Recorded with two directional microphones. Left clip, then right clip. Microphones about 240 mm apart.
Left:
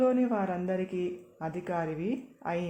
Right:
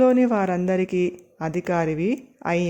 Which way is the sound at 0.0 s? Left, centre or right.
Right.